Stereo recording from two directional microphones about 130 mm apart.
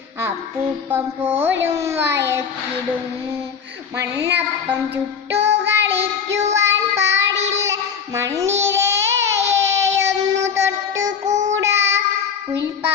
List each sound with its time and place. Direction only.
0.9 s a child's voice: 15° right (ahead or behind)
3.9 s a woman's voice: 20° right (ahead or behind)
5.5 s child singing: 20° right (ahead or behind)
11.3 s child singing: 70° right (ahead or behind)
11.5 s child singing: 20° right (ahead or behind)